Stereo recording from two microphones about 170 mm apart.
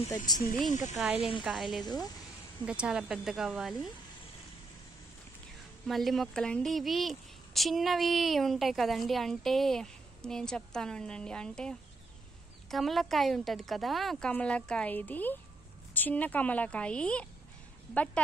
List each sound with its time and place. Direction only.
0.3 s a woman's voice: 25° left (ahead or behind)
0.7 s speech: 45° left (ahead or behind)
0.9 s speech: centre (ahead or behind)
5.9 s speech: centre (ahead or behind)
12.7 s a woman's voice: centre (ahead or behind)